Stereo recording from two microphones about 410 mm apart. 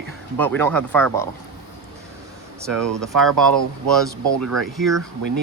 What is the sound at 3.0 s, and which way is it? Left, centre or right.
Speech, centre.